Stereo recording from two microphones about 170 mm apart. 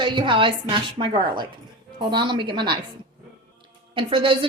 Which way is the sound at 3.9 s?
30° right (ahead or behind).